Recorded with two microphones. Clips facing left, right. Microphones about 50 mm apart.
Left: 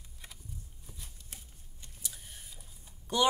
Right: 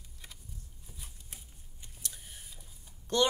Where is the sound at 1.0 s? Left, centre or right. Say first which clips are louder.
Even; centre.